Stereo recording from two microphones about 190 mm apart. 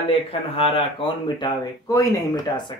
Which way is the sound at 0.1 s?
30° left (ahead or behind).